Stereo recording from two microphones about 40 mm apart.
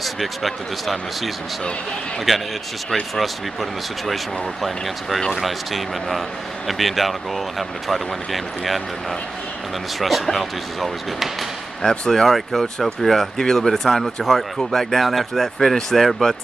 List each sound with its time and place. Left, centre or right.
0.0 s speech: centre
4.1 s speech: centre
9.9 s speech: centre
11.8 s speech: left
12.1 s speech: centre